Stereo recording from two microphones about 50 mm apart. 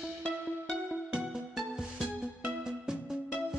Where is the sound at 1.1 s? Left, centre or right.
Centre.